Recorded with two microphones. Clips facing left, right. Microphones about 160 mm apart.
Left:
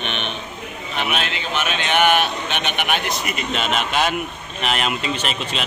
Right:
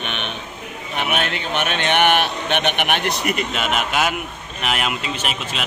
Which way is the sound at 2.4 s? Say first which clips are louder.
Right 3 dB; 55° right (ahead or behind).